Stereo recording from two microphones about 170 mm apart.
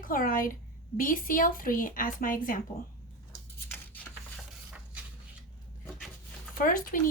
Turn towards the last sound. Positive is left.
turn(degrees=55)  # may be behind; listen again after turning